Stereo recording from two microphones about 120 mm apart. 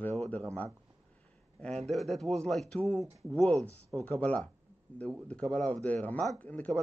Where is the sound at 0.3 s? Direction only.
10° left (ahead or behind).